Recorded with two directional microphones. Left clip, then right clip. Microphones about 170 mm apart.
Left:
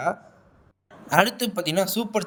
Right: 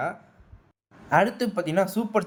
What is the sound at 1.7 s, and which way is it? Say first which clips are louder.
Speech: left 1 dB; 45° left (ahead or behind).